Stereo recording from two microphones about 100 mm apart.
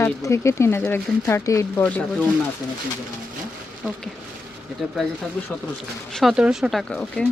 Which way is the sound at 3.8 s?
10° right (ahead or behind).